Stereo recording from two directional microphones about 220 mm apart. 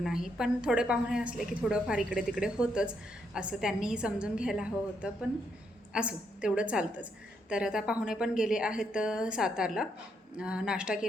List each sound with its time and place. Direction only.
0.0 s a woman's voice: centre (ahead or behind)